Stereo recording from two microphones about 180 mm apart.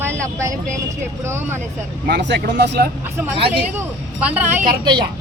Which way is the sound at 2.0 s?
70° right (ahead or behind).